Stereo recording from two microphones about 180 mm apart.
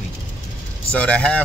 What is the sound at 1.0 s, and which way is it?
Speech, 5° left (ahead or behind).